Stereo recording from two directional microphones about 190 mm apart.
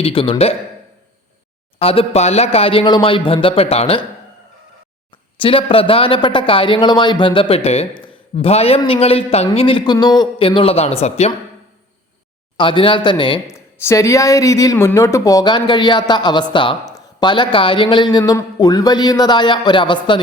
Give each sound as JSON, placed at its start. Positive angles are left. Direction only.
{"t": 0.0, "sound": "speech", "side_deg": 30}
{"t": 1.8, "sound": "speech", "side_deg": 30}
{"t": 5.4, "sound": "speech", "side_deg": 30}
{"t": 12.5, "sound": "speech", "side_deg": 25}